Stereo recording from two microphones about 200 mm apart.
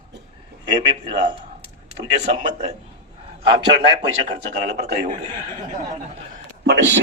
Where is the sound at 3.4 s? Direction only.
25° right (ahead or behind).